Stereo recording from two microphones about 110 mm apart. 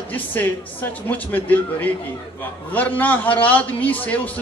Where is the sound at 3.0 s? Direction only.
15° left (ahead or behind).